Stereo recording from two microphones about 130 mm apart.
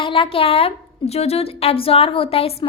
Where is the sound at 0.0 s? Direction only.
40° left (ahead or behind).